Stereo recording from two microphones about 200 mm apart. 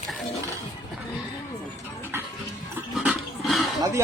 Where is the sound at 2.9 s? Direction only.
Centre (ahead or behind).